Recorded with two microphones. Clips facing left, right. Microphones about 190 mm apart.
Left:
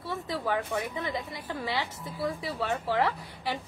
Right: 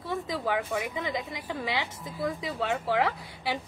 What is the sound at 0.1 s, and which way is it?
A woman's voice, 15° right (ahead or behind).